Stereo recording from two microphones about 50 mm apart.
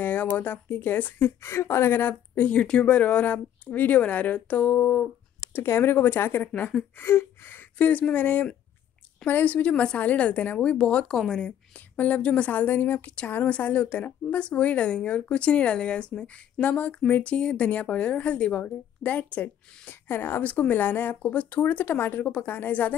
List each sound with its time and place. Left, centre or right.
0.0 s speech: left
1.4 s speech: left
2.5 s speech: centre
5.5 s speech: left
7.0 s a sound: left
7.7 s speech: left
11.1 s speech: centre
11.3 s speech: left
19.9 s speech: left